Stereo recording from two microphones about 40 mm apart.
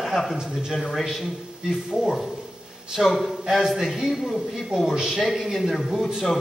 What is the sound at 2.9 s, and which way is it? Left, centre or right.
Speech, centre.